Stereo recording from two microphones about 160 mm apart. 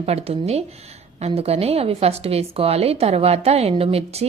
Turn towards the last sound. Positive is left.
turn(degrees=-40)  # may be behind; listen again after turning